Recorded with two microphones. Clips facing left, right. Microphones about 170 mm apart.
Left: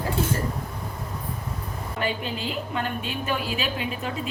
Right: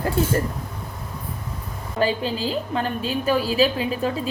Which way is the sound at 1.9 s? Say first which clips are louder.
Right 7 dB; 30° right (ahead or behind).